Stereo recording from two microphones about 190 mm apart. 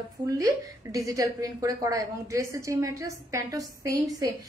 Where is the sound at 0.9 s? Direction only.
20° right (ahead or behind).